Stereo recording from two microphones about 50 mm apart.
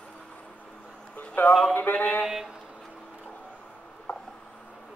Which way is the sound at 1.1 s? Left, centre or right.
Left.